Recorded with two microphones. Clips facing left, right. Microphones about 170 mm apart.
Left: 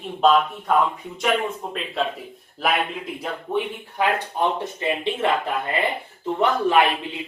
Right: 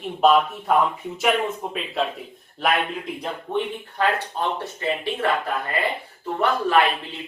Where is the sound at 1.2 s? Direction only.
5° right (ahead or behind).